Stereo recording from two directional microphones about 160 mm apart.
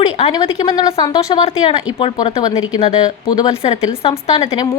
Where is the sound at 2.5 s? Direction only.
45° left (ahead or behind).